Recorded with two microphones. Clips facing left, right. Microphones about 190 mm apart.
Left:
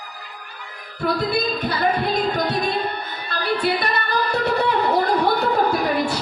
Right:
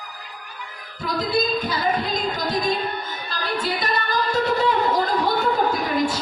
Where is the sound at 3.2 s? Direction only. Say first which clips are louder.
Left 5 dB; 65° left (ahead or behind).